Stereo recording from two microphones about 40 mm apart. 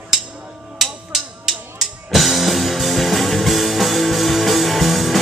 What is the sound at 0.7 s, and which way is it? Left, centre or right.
Music, centre.